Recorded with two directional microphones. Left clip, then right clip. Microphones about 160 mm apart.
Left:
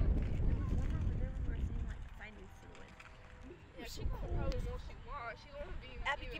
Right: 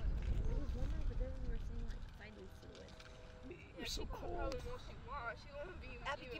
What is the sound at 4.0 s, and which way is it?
Speech, 30° right (ahead or behind).